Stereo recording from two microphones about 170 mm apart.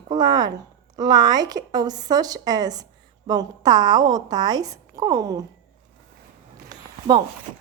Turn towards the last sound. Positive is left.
turn(degrees=-25)  # may be behind; listen again after turning